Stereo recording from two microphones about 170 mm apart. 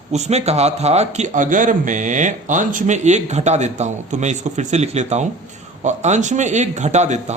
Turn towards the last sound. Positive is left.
turn(degrees=-45)  # may be behind; listen again after turning